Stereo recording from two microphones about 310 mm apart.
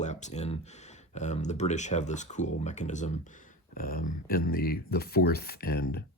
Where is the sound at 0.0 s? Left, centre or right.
Left.